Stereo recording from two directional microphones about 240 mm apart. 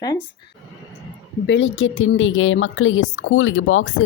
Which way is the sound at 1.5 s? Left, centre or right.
Left.